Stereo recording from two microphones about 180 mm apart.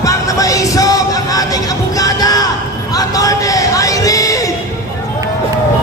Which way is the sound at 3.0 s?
20° left (ahead or behind).